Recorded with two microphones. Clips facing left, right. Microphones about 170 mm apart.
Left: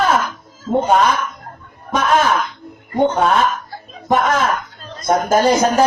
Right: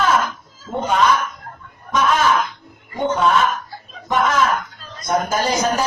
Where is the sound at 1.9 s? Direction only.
55° left (ahead or behind).